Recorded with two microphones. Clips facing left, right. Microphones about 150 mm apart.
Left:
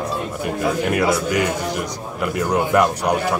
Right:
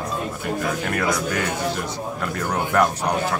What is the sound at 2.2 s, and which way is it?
Speech, 10° left (ahead or behind).